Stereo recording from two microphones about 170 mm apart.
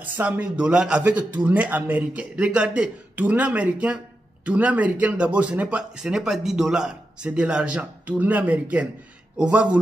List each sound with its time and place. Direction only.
0.0 s speech: 10° right (ahead or behind)